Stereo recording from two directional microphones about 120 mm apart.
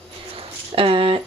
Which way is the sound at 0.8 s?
50° right (ahead or behind).